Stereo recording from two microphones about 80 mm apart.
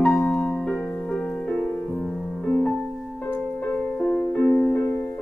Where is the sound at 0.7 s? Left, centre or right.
Centre.